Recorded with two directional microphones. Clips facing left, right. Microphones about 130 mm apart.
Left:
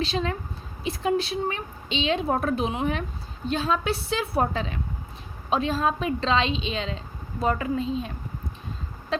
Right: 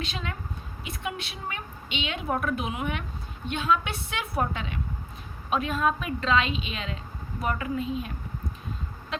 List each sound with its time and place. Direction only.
0.0 s a woman's voice: 35° left (ahead or behind)